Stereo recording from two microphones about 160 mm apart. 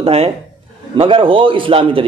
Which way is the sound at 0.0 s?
40° right (ahead or behind).